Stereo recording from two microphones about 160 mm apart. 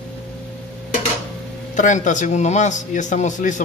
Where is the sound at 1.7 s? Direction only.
50° left (ahead or behind).